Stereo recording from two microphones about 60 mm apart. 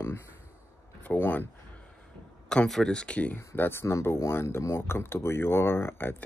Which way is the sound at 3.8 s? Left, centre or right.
Left.